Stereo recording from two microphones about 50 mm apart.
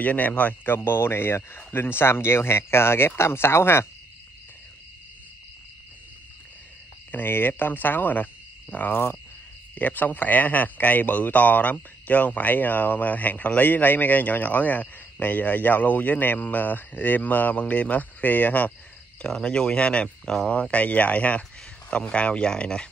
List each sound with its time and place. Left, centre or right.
0.0 s speech: left
0.7 s speech: left
7.1 s speech: left
19.2 s speech: centre
20.3 s speech: centre
20.7 s speech: left